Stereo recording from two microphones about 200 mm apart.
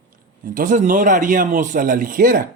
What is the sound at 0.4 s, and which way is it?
A man's voice, 40° right (ahead or behind).